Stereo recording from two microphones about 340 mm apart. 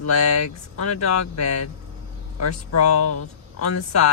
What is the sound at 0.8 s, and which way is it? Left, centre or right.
Speech, left.